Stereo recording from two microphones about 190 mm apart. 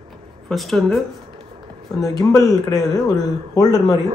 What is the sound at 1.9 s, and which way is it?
Speech, 20° left (ahead or behind).